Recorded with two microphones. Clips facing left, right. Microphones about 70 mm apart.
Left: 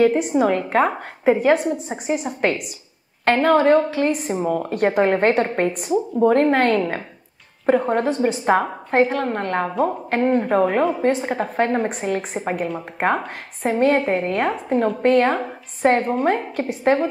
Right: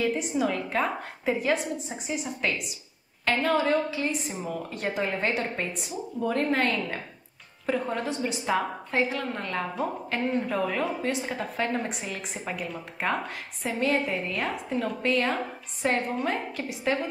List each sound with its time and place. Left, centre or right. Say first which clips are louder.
0.0 s a woman's voice: left 10 dB; left